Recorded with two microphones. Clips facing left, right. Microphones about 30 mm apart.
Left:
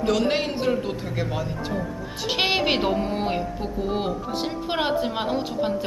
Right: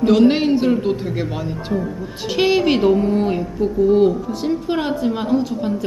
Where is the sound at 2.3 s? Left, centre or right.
Centre.